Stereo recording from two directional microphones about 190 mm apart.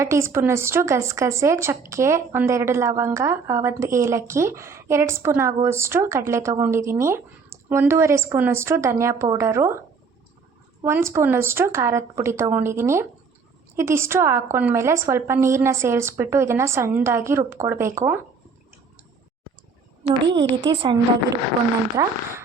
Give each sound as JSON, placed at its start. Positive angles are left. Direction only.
{"t": 0.0, "sound": "a woman's voice", "side_deg": -15}
{"t": 10.8, "sound": "a woman's voice", "side_deg": -15}
{"t": 20.7, "sound": "a woman's voice", "side_deg": -20}